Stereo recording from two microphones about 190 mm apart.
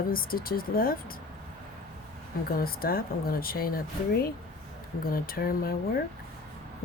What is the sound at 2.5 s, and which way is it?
Speech, 50° left (ahead or behind).